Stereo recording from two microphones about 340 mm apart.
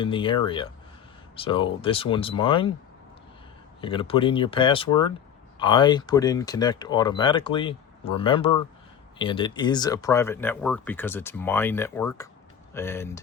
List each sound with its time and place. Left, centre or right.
0.0 s speech: centre
3.8 s speech: centre